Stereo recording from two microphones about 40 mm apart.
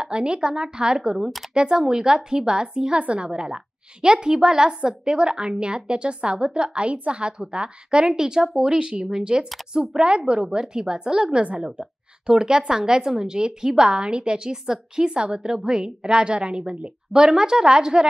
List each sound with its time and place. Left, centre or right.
0.0 s a woman's voice: right
3.0 s a woman's voice: right
3.3 s a woman's voice: centre
11.6 s a woman's voice: centre